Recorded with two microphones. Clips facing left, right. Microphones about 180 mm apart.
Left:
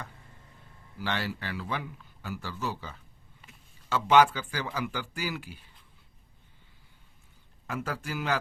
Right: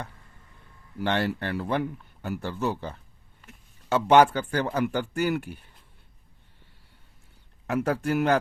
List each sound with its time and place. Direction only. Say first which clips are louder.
0.9 s speech: right 7 dB; 55° right (ahead or behind)
7.7 s speech: right 9 dB; 65° right (ahead or behind)